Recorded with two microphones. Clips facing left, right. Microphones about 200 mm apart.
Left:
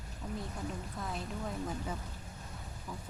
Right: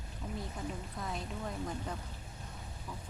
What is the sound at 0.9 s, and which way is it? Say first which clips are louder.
Speech: left 1 dB; centre (ahead or behind).